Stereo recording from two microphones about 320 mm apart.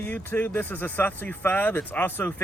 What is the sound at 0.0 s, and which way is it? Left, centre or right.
Speech, centre.